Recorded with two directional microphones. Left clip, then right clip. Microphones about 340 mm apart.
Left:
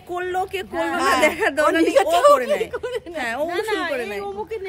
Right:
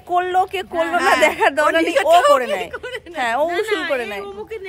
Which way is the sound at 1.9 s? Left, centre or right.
Centre.